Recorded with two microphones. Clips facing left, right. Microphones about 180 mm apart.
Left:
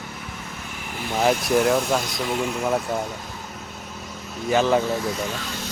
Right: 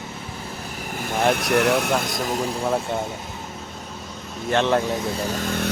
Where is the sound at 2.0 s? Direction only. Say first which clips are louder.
Right 1 dB; 50° right (ahead or behind).